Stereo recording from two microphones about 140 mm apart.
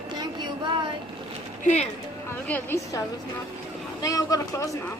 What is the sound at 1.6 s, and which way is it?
Speech, 55° left (ahead or behind).